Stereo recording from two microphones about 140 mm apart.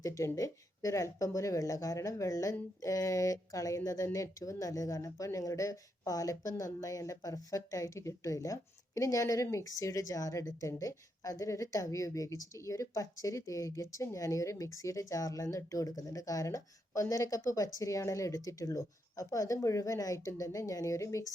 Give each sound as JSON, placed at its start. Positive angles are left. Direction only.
{"t": 0.0, "sound": "speech", "side_deg": 25}